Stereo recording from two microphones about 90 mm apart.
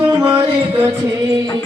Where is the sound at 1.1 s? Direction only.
40° right (ahead or behind).